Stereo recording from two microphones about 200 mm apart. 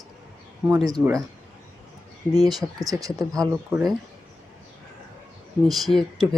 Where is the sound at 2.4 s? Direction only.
20° right (ahead or behind).